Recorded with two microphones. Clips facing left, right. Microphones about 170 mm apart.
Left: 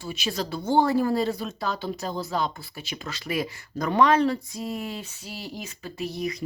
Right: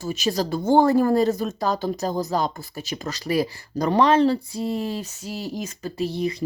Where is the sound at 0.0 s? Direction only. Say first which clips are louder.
Right 6 dB; 40° right (ahead or behind).